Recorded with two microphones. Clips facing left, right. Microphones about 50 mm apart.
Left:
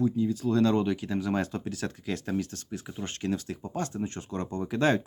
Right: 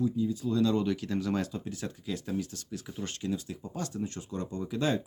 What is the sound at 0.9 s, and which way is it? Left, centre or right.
Speech, centre.